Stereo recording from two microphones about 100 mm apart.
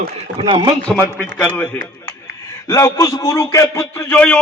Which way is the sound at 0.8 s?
15° left (ahead or behind).